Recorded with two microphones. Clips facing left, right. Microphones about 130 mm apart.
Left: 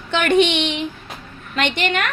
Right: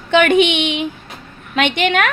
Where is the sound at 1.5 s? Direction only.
70° right (ahead or behind).